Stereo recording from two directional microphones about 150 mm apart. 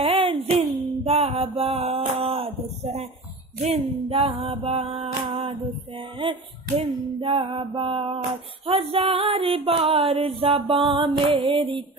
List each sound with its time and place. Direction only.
0.0 s music: 35° right (ahead or behind)
3.6 s a sound: 40° right (ahead or behind)
4.6 s music: 40° right (ahead or behind)